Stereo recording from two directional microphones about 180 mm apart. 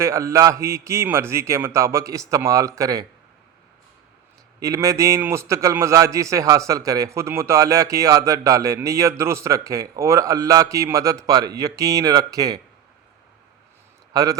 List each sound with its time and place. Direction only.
0.0 s a man's voice: 15° right (ahead or behind)
4.6 s a man's voice: 15° right (ahead or behind)
14.1 s a man's voice: 20° right (ahead or behind)